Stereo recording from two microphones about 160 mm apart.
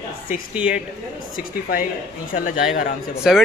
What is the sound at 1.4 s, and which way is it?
A man's voice, 60° left (ahead or behind).